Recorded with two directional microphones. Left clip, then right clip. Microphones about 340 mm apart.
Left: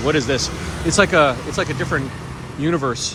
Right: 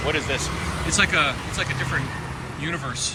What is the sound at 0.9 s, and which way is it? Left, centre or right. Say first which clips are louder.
Speech: left 6 dB; centre.